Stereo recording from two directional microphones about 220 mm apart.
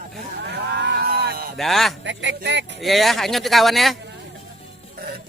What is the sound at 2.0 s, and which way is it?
Speech, 55° right (ahead or behind).